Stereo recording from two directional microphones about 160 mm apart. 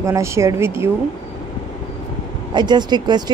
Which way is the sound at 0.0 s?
20° right (ahead or behind).